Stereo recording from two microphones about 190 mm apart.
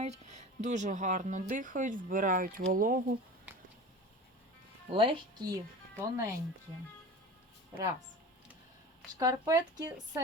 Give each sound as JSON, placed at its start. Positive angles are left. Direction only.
{"t": 0.0, "sound": "speech", "side_deg": -35}
{"t": 4.9, "sound": "speech", "side_deg": -30}
{"t": 6.0, "sound": "speech", "side_deg": -15}
{"t": 9.1, "sound": "speech", "side_deg": -20}